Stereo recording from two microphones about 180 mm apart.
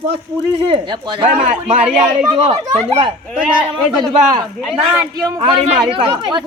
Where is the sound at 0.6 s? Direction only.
25° right (ahead or behind).